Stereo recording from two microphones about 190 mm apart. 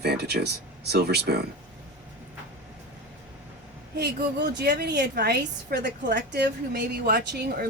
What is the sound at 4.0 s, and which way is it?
A woman's voice, 60° right (ahead or behind).